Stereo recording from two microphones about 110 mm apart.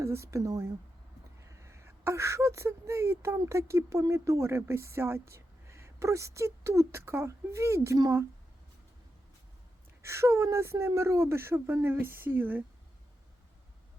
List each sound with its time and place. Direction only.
0.0 s speech: 25° right (ahead or behind)
10.0 s speech: 25° right (ahead or behind)